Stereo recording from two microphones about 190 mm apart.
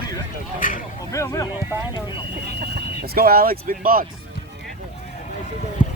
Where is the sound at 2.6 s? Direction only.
55° right (ahead or behind).